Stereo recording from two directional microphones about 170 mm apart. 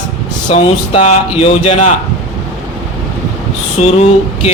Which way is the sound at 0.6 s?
35° left (ahead or behind).